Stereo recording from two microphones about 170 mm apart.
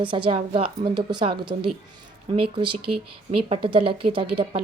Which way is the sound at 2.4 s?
30° right (ahead or behind).